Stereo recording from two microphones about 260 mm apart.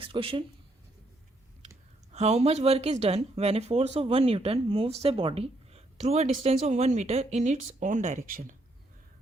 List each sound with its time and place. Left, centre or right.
0.0 s speech: right
2.1 s speech: right